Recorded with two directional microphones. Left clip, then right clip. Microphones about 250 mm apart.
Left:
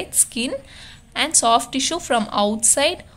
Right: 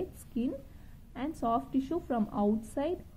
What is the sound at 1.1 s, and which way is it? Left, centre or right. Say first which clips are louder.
A woman's voice: left 15 dB; centre.